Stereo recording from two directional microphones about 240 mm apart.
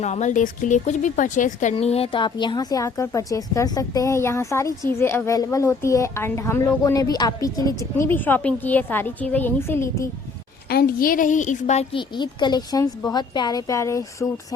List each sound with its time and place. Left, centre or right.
0.0 s speech: left; by 10.1 s centre
10.7 s a woman's voice: left; by 14.3 s centre